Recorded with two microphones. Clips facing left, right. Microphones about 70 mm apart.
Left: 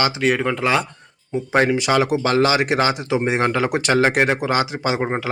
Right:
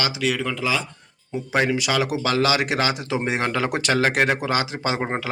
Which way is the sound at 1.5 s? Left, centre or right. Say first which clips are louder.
Left 4 dB; left.